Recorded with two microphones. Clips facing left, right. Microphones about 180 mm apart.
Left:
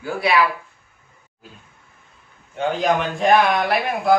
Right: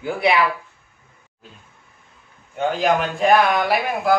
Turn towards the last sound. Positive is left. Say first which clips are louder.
# left 1 dB
turn(degrees=0)  # may be behind; listen again after turning